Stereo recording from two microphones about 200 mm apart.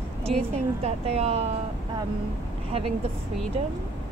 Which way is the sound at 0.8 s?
30° right (ahead or behind).